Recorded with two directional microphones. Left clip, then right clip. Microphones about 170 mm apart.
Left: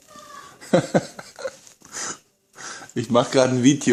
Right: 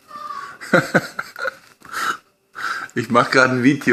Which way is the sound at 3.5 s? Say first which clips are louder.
Right 1 dB; 35° left (ahead or behind).